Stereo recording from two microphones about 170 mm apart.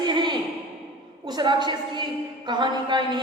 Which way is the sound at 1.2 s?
25° right (ahead or behind).